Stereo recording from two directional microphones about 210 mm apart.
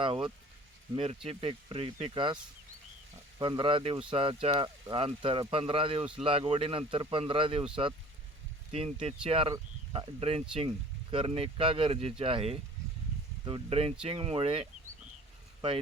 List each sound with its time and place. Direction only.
0.0 s speech: 25° right (ahead or behind)